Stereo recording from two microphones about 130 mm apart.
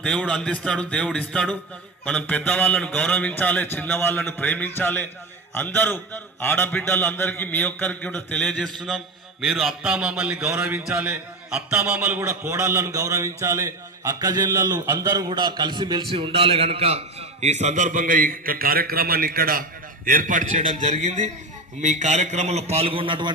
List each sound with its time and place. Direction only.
0.0 s a man's voice: 10° left (ahead or behind)
10.4 s a man's voice: 20° right (ahead or behind); by 18.7 s 90° right
20.1 s a man's voice: 90° right; by 23.3 s 40° right (ahead or behind)